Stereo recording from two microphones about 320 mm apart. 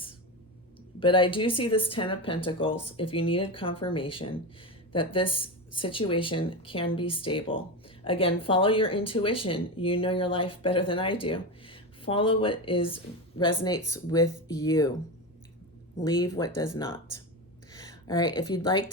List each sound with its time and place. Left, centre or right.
0.9 s speech: centre
16.2 s speech: centre